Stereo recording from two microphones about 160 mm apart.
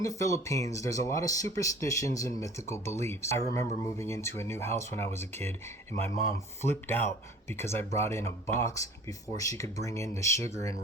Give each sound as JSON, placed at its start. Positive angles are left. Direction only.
{"t": 0.0, "sound": "speech", "side_deg": 20}
{"t": 6.6, "sound": "speech", "side_deg": 15}